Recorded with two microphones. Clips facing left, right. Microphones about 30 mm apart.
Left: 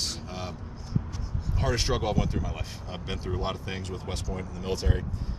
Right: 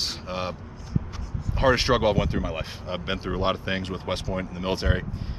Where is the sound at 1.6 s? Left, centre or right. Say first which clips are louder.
Right 8 dB; right.